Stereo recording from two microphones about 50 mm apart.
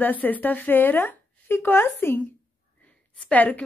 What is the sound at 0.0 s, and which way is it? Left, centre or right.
A woman's voice, left.